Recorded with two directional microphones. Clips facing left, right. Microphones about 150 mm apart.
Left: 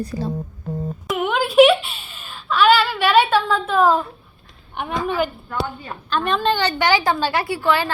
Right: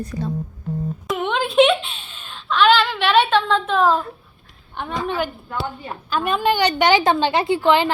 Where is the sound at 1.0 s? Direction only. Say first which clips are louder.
Left 2 dB; 5° left (ahead or behind).